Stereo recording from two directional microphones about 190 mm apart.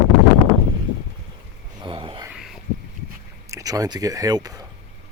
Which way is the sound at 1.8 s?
25° right (ahead or behind).